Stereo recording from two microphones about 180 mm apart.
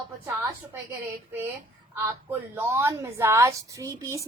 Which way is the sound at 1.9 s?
10° right (ahead or behind).